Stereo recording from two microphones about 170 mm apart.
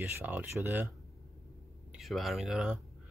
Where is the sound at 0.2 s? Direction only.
10° right (ahead or behind).